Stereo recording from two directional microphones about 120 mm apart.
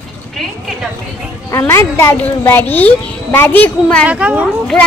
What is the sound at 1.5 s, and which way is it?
A child's voice, 25° left (ahead or behind).